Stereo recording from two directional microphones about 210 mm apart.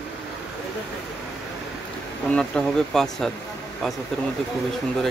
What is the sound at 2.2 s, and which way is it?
Speech, 5° left (ahead or behind).